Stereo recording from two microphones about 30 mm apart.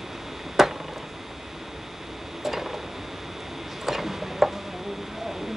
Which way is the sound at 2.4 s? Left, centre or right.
Centre.